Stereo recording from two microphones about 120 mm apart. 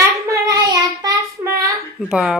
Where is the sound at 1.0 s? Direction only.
25° right (ahead or behind).